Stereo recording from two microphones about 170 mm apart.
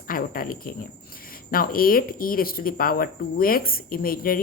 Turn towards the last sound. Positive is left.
turn(degrees=60)  # may be behind; listen again after turning